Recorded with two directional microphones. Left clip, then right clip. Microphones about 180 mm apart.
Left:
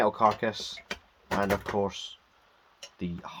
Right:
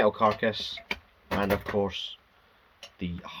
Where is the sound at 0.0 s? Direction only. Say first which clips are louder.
Right 1 dB; 40° left (ahead or behind).